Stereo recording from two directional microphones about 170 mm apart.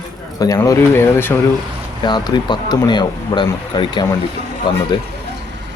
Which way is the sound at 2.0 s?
25° left (ahead or behind).